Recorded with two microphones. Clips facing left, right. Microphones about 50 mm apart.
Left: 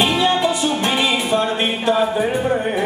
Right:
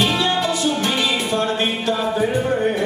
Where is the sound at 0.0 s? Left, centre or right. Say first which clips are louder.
Left 2 dB; centre.